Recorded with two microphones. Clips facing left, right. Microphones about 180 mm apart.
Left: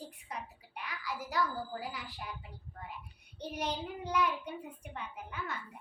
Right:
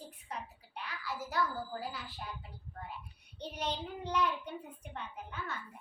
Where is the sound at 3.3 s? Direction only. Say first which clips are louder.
Left 1 dB; 10° left (ahead or behind).